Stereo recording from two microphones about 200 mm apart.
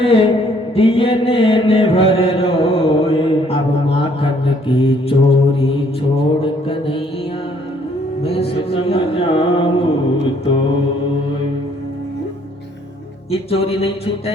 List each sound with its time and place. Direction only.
0.0 s a sound: 30° left (ahead or behind)
0.8 s mantra: 30° left (ahead or behind)
8.2 s music: 30° left (ahead or behind)
13.3 s music: 30° left (ahead or behind)